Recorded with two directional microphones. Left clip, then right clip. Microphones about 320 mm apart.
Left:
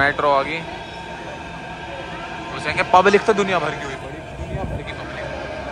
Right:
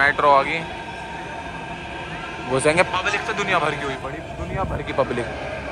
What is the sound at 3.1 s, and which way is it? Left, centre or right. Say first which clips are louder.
Speech: left 7 dB; left.